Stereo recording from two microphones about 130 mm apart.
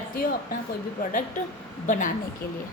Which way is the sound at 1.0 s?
90° left.